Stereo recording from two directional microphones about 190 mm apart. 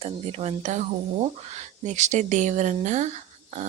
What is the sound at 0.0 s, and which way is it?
Speech, 30° right (ahead or behind).